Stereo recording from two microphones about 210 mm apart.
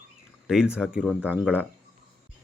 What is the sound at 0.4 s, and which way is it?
Speech, centre (ahead or behind).